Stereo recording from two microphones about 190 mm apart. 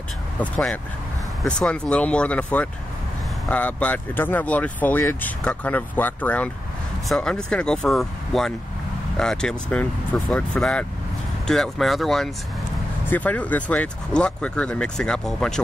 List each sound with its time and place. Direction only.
0.4 s speech: 10° left (ahead or behind)